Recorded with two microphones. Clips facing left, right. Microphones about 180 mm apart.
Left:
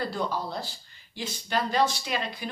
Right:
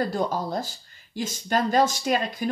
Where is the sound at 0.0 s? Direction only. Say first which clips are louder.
Right 4 dB; 45° right (ahead or behind).